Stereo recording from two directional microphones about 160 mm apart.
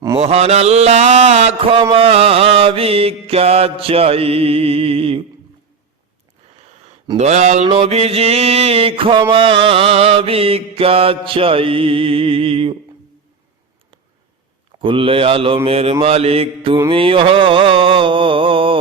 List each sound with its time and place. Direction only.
0.2 s mantra: 40° right (ahead or behind)
7.2 s mantra: 45° right (ahead or behind)
14.8 s mantra: 30° right (ahead or behind)